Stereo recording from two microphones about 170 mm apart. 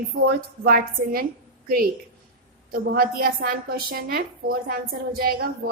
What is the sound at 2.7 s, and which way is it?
A woman's voice, 60° right (ahead or behind).